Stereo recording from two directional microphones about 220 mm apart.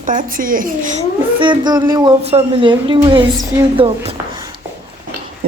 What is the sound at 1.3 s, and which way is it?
A woman's voice, 20° right (ahead or behind).